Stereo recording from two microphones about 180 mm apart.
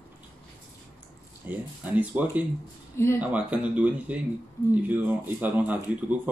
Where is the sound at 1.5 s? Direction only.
10° right (ahead or behind).